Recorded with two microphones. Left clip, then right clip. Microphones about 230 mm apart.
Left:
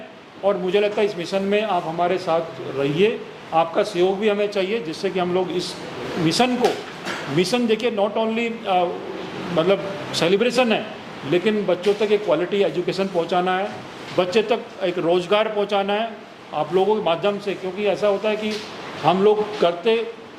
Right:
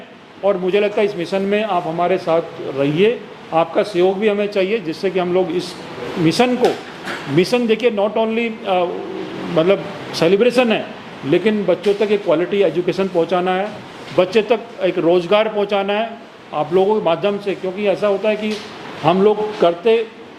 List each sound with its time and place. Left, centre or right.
0.4 s a man's voice: right